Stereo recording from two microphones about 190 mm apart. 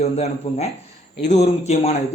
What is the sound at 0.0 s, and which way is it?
Speech, 35° left (ahead or behind).